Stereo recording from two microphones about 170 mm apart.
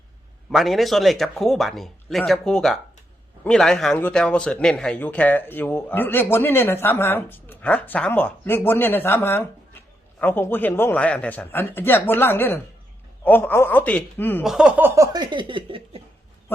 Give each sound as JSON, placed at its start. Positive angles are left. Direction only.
{"t": 0.5, "sound": "speech", "side_deg": 0}
{"t": 14.4, "sound": "speech", "side_deg": -5}